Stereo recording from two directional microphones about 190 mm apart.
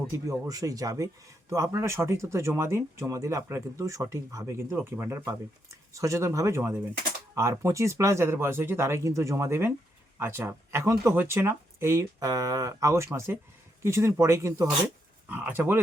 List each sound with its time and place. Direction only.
0.3 s speech: 20° right (ahead or behind)